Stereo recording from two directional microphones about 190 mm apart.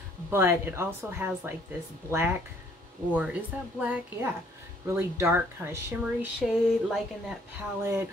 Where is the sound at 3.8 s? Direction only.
10° right (ahead or behind).